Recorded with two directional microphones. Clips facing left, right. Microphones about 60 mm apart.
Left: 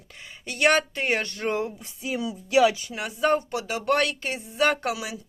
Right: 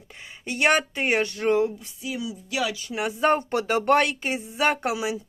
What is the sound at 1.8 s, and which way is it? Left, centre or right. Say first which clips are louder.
Speech: left 2 dB; left.